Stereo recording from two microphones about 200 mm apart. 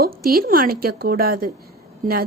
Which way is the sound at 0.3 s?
45° right (ahead or behind).